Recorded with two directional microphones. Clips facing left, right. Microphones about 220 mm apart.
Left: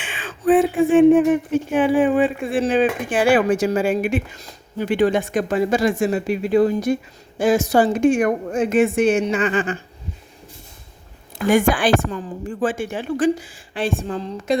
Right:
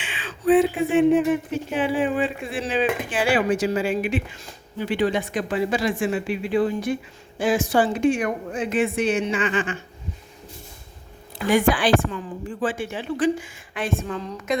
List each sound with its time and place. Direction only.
0.0 s speech: 45° left (ahead or behind)
11.4 s speech: 45° left (ahead or behind)